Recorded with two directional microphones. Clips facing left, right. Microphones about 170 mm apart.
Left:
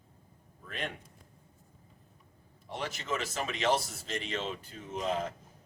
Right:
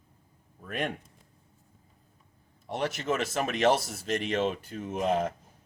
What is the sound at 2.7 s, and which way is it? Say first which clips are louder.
Speech: right 6 dB; 55° right (ahead or behind).